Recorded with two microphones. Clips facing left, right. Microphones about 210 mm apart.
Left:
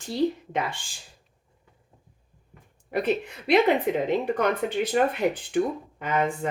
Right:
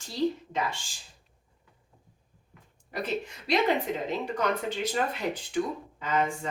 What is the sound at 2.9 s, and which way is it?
Speech, 60° left (ahead or behind).